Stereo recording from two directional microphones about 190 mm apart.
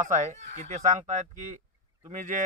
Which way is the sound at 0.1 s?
40° right (ahead or behind).